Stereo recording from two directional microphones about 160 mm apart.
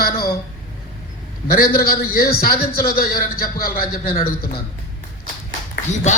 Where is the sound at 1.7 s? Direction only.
65° left (ahead or behind).